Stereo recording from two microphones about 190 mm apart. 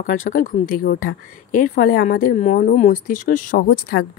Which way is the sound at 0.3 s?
45° left (ahead or behind).